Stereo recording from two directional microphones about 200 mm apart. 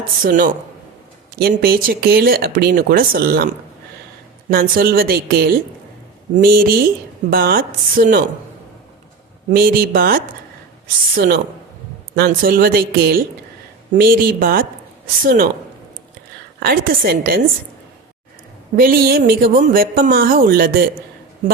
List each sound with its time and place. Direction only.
0.2 s speech: 45° right (ahead or behind)
9.5 s speech: 50° right (ahead or behind)
16.6 s speech: 50° right (ahead or behind)
18.8 s speech: 50° right (ahead or behind)